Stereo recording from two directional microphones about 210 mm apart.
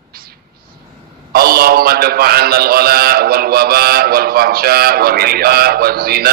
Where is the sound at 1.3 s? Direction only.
45° right (ahead or behind).